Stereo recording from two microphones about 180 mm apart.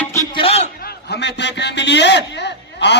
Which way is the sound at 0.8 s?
65° left (ahead or behind).